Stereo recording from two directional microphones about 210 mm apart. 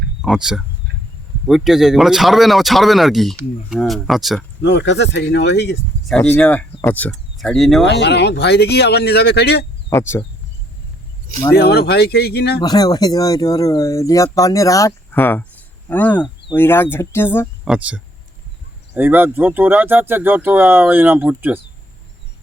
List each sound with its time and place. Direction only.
0.2 s speech: 5° right (ahead or behind)
4.6 s speech: 55° left (ahead or behind)
6.1 s speech: 5° left (ahead or behind)
7.9 s speech: 55° left (ahead or behind)
9.9 s speech: 10° left (ahead or behind)
11.5 s speech: 50° left (ahead or behind)
12.6 s speech: 20° left (ahead or behind)
17.7 s speech: 5° right (ahead or behind)